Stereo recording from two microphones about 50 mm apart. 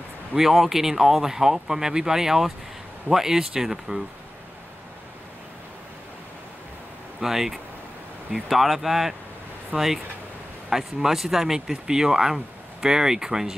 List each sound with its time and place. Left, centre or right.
0.4 s speech: centre
7.2 s speech: centre
9.7 s speech: centre
10.7 s speech: centre